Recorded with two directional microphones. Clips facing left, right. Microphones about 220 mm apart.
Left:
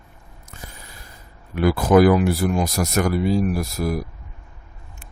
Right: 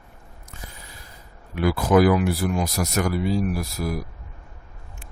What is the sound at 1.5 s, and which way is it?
Speech, 45° left (ahead or behind).